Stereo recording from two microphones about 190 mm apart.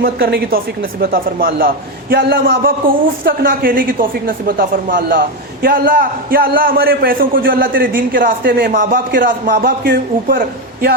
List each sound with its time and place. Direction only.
0.0 s a man's voice: 55° right (ahead or behind)